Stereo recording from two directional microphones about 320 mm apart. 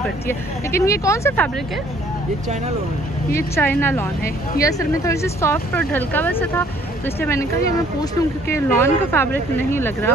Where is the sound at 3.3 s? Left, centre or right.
Centre.